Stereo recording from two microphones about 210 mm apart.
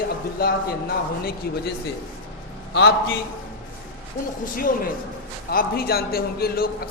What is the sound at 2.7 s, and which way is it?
Speech, 55° left (ahead or behind).